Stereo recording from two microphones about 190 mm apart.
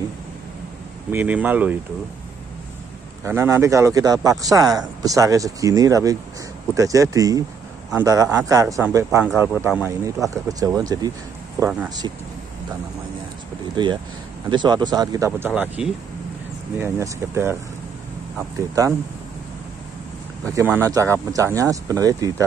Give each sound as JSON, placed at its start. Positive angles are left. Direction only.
{"t": 1.1, "sound": "speech", "side_deg": -10}
{"t": 3.3, "sound": "speech", "side_deg": -15}
{"t": 13.8, "sound": "speech", "side_deg": -25}
{"t": 20.5, "sound": "speech", "side_deg": -10}